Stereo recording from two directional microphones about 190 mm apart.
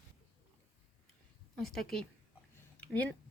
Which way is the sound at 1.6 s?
50° left (ahead or behind).